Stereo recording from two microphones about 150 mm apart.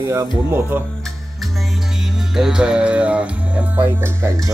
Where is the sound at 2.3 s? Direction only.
5° right (ahead or behind).